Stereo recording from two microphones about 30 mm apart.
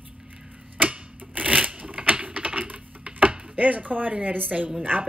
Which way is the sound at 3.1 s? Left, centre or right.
Right.